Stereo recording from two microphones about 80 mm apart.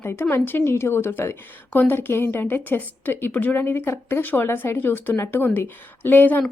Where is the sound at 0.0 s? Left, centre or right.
Left.